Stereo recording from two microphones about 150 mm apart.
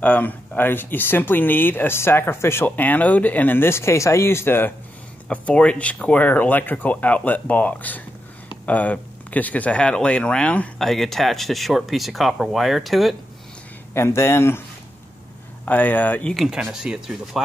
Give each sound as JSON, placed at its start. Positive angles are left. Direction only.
{"t": 0.0, "sound": "speech", "side_deg": 10}
{"t": 13.9, "sound": "speech", "side_deg": 15}
{"t": 15.6, "sound": "speech", "side_deg": 10}
{"t": 16.4, "sound": "speech", "side_deg": -5}